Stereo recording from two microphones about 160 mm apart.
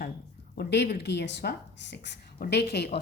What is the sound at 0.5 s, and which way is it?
A woman's voice, 90° left.